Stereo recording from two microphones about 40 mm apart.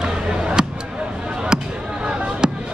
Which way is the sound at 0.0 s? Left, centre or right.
Right.